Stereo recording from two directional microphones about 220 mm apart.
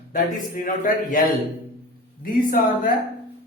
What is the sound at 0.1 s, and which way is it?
Speech, 35° left (ahead or behind).